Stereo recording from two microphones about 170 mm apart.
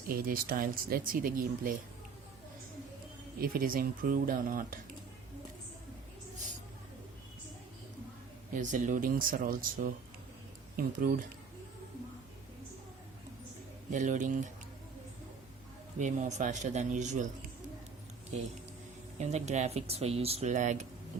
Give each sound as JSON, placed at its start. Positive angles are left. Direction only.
{"t": 0.1, "sound": "speech", "side_deg": -60}
{"t": 3.4, "sound": "speech", "side_deg": -55}
{"t": 8.5, "sound": "speech", "side_deg": -50}
{"t": 13.9, "sound": "speech", "side_deg": -50}
{"t": 16.0, "sound": "speech", "side_deg": -45}
{"t": 18.3, "sound": "speech", "side_deg": -40}